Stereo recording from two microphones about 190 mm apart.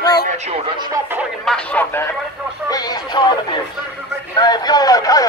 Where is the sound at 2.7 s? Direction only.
20° left (ahead or behind).